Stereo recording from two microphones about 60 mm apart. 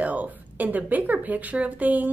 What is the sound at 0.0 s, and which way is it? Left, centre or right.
A woman's voice, right.